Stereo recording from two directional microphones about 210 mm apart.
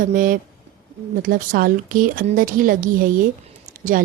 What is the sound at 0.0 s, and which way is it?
A woman's voice, 40° right (ahead or behind).